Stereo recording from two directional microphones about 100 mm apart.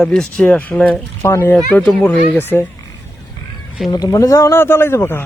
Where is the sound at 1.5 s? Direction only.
10° left (ahead or behind).